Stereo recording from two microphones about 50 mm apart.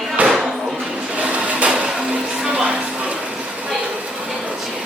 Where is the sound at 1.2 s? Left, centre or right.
Right.